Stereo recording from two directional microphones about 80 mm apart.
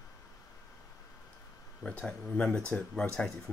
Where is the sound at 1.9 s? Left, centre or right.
Centre.